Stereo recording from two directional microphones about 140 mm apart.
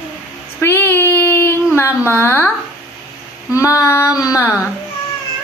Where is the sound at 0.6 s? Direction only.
15° left (ahead or behind).